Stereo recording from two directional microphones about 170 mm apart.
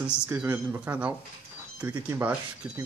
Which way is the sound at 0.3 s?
10° right (ahead or behind).